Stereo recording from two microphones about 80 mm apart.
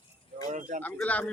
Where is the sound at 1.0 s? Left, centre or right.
Centre.